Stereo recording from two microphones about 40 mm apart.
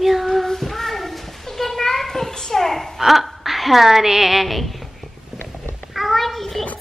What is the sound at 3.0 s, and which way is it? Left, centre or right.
A woman's voice, centre.